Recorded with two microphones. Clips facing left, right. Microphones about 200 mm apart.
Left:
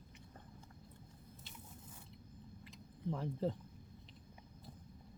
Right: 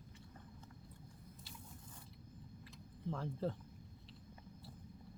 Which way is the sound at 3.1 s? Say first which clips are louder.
Left 2 dB; 15° left (ahead or behind).